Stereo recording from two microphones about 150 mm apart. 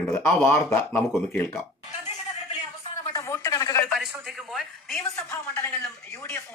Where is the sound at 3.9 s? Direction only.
Centre (ahead or behind).